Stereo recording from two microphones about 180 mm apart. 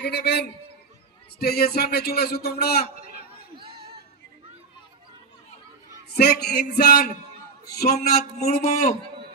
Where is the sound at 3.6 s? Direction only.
60° right (ahead or behind).